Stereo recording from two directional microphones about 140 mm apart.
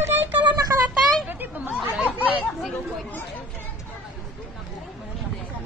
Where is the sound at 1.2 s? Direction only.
15° right (ahead or behind).